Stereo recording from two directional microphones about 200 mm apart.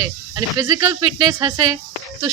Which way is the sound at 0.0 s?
15° right (ahead or behind).